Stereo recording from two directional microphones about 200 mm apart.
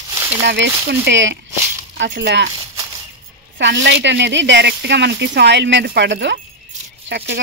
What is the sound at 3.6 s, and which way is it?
Speech, 65° right (ahead or behind).